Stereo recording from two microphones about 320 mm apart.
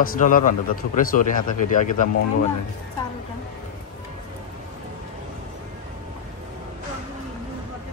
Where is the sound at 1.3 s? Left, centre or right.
Left.